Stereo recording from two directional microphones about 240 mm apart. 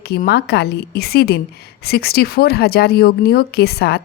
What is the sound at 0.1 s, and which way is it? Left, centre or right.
Speech, left.